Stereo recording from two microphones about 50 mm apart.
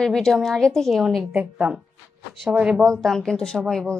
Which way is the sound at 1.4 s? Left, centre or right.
Right.